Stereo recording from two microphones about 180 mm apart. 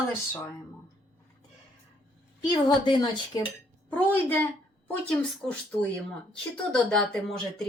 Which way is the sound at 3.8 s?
10° left (ahead or behind).